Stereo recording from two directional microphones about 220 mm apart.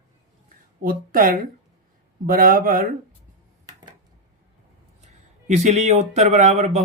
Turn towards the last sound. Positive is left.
turn(degrees=-30)  # may be behind; listen again after turning